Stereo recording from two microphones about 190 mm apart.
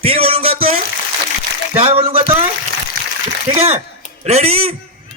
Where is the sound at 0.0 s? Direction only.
30° right (ahead or behind).